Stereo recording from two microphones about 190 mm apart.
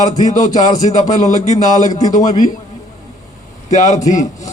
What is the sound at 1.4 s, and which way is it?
Speech, 40° left (ahead or behind).